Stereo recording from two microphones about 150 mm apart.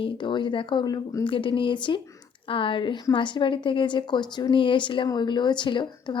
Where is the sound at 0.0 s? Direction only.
35° left (ahead or behind).